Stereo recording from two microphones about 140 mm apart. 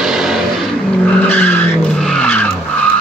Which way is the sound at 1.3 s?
10° left (ahead or behind).